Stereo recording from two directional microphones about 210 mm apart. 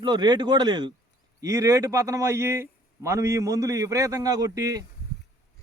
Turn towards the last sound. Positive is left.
turn(degrees=-15)  # may be behind; listen again after turning